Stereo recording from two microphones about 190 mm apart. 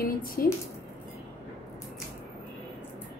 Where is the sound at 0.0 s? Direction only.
50° left (ahead or behind).